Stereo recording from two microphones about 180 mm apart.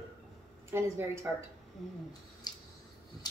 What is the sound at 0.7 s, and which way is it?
Speech, 15° right (ahead or behind).